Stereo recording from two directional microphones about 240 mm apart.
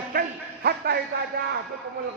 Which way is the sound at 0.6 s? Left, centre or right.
Right.